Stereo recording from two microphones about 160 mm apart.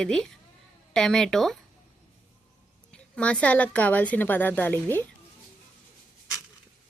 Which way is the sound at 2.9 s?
5° left (ahead or behind).